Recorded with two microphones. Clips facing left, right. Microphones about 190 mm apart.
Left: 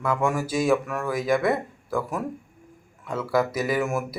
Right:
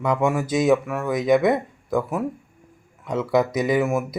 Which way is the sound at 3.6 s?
20° right (ahead or behind).